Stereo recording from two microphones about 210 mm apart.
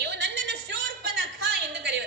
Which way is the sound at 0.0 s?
55° right (ahead or behind).